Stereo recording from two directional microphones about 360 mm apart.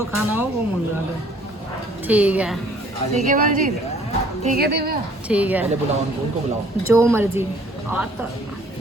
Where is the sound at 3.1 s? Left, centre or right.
Right.